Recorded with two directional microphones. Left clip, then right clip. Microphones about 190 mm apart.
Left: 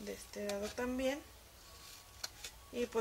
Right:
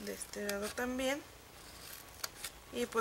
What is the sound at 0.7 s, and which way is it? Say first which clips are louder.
Speech: right 1 dB; 25° right (ahead or behind).